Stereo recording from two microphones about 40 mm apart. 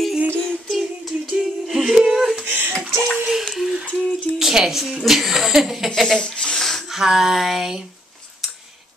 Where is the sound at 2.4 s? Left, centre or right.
Right.